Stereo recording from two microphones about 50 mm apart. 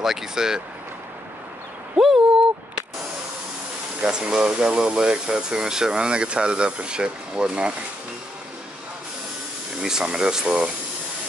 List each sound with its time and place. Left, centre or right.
0.0 s speech: centre
2.0 s speech: centre
4.0 s speech: centre
9.8 s speech: centre